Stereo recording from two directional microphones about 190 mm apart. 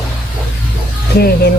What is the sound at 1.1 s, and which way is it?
Speech, 55° left (ahead or behind).